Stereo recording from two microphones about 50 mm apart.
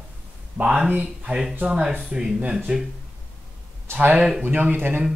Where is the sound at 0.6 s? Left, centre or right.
Right.